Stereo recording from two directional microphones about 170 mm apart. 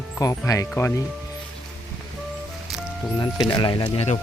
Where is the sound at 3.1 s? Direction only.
25° left (ahead or behind).